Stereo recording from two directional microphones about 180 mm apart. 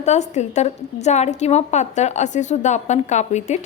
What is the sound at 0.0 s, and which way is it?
A woman's voice, 40° left (ahead or behind).